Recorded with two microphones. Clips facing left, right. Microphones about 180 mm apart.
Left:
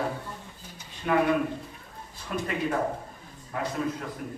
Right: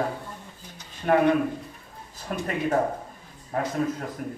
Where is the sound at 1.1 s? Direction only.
45° right (ahead or behind).